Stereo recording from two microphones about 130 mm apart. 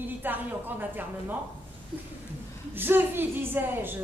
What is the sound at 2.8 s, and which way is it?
A woman's voice, 15° right (ahead or behind).